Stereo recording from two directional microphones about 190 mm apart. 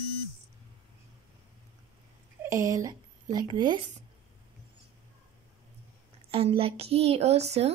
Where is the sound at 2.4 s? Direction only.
15° right (ahead or behind).